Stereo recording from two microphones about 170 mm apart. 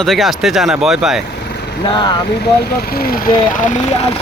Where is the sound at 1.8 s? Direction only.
30° left (ahead or behind).